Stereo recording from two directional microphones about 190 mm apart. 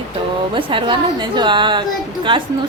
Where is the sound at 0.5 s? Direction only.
25° right (ahead or behind).